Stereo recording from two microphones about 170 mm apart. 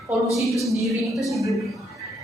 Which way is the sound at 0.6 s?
Centre (ahead or behind).